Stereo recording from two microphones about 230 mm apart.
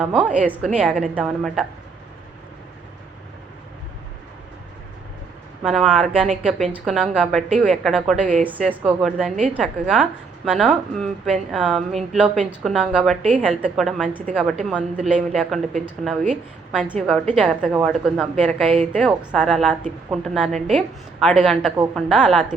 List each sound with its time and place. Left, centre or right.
0.0 s a woman's voice: centre
5.6 s a woman's voice: centre
8.2 s a woman's voice: right
8.7 s a woman's voice: centre